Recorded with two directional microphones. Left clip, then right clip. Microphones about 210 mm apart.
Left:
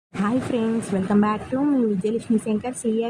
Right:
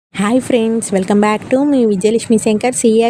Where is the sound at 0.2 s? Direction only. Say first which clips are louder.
Right 10 dB; 40° right (ahead or behind).